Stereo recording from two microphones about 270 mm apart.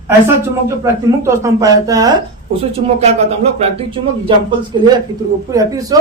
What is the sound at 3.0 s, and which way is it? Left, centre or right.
Speech, right.